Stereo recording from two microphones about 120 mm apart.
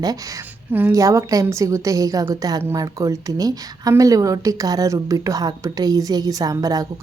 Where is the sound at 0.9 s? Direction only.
30° right (ahead or behind).